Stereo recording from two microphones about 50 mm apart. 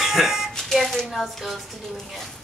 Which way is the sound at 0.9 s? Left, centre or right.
Centre.